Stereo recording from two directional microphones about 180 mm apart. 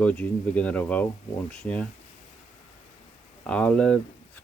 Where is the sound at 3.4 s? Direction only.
5° left (ahead or behind).